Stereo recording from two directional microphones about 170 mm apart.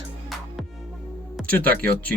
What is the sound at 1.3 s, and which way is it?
Speech, 10° left (ahead or behind).